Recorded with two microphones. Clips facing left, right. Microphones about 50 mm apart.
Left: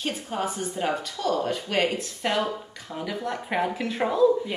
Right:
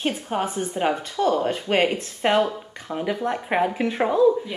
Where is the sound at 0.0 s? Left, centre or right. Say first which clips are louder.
Right 4 dB; right.